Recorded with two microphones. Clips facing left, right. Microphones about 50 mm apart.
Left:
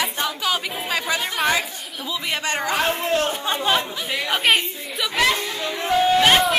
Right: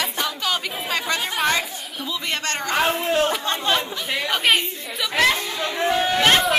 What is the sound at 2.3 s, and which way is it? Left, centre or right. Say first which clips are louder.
Speech: left 2 dB; centre.